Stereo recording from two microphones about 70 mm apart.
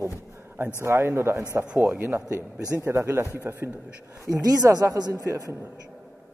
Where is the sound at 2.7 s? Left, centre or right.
Right.